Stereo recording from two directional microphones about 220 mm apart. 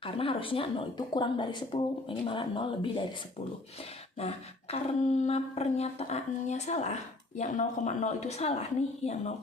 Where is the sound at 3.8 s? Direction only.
25° left (ahead or behind).